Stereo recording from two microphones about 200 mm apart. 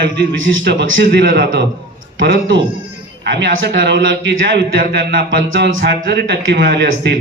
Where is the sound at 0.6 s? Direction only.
60° right (ahead or behind).